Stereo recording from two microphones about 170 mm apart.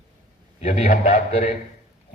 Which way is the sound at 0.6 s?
45° left (ahead or behind).